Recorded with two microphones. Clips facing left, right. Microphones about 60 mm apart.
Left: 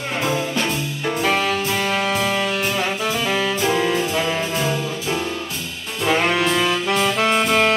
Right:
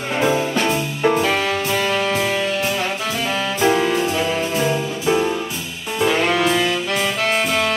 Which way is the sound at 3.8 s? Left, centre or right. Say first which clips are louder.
Right 1 dB; centre.